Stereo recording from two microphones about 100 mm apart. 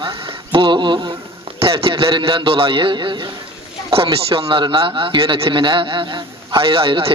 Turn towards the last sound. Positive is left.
turn(degrees=-65)  # may be behind; listen again after turning